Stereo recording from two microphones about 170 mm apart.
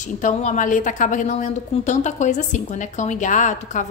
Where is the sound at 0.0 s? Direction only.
45° left (ahead or behind).